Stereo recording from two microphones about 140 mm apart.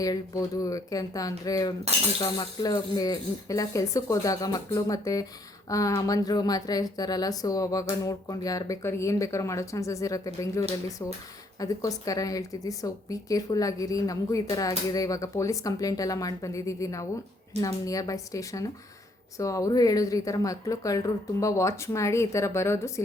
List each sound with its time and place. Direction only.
0.0 s speech: 25° left (ahead or behind)